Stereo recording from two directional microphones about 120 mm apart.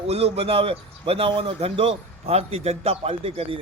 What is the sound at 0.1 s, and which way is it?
A man's voice, 55° right (ahead or behind).